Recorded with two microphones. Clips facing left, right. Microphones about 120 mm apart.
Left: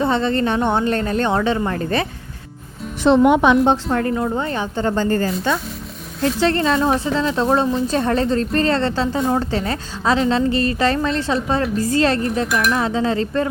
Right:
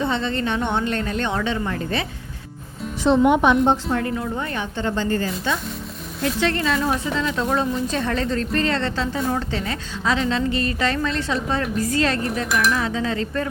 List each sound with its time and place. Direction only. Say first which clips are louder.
0.0 s speech: left 5 dB; 40° left (ahead or behind)
3.0 s a woman's voice: left 3 dB; 85° left
3.8 s a woman's voice: left 4 dB; 45° left (ahead or behind)